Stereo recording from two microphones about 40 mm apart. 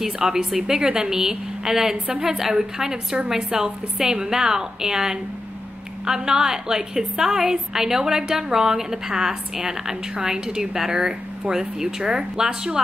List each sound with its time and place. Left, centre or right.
0.0 s a woman's voice: centre